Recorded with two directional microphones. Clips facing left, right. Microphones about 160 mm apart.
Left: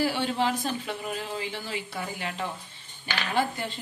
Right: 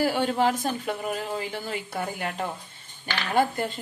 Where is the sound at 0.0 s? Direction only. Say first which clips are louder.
Right 3 dB; 50° right (ahead or behind).